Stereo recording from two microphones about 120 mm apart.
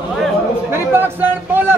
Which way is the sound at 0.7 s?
15° right (ahead or behind).